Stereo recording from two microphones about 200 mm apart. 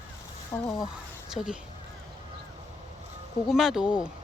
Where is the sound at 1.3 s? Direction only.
5° right (ahead or behind).